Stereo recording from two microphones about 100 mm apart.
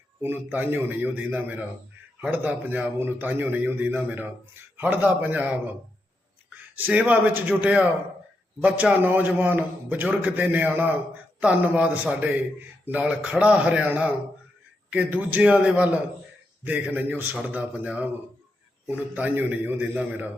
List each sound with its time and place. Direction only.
0.2 s a man's voice: 20° right (ahead or behind)
6.7 s a man's voice: 15° right (ahead or behind)